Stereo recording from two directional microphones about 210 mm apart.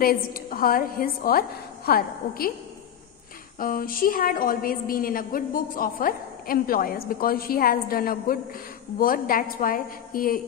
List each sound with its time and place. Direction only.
0.0 s a woman's voice: 45° left (ahead or behind)
3.5 s a woman's voice: 40° left (ahead or behind)